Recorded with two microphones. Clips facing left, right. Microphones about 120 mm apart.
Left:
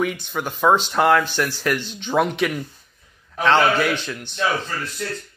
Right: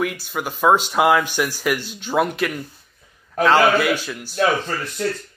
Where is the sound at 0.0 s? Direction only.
Centre (ahead or behind).